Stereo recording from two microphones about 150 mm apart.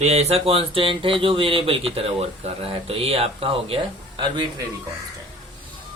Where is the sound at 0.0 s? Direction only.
45° right (ahead or behind); by 4.6 s 30° right (ahead or behind).